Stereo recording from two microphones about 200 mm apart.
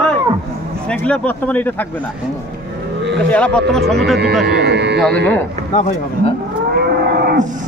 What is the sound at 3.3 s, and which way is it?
Speech, 5° left (ahead or behind).